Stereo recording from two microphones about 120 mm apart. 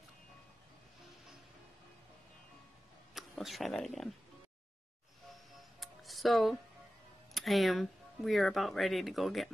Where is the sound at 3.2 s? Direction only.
Centre (ahead or behind).